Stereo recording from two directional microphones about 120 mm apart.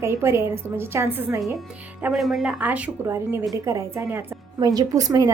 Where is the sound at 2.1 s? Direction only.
Centre (ahead or behind).